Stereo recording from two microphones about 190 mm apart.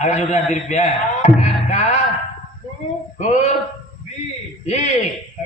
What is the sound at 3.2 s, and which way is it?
Speech, 35° left (ahead or behind).